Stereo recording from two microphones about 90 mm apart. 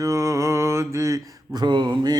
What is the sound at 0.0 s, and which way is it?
Mantra, 35° right (ahead or behind).